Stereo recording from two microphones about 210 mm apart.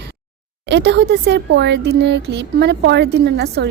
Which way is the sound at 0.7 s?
55° right (ahead or behind).